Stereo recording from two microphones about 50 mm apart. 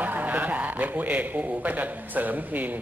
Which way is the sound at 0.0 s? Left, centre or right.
Right.